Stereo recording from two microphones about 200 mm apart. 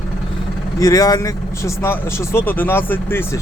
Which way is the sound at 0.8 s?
15° left (ahead or behind).